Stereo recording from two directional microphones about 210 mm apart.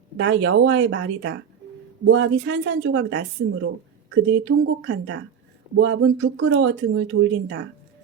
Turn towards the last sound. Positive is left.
turn(degrees=-60)  # may be behind; listen again after turning